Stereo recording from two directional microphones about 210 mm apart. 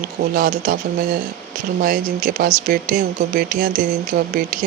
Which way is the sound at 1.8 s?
45° right (ahead or behind).